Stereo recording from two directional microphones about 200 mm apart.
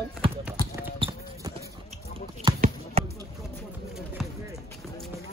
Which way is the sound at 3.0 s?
30° right (ahead or behind).